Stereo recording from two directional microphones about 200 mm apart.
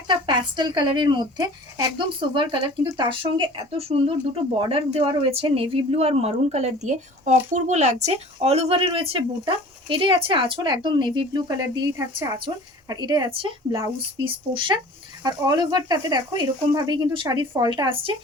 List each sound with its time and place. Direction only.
0.1 s speech: 20° right (ahead or behind)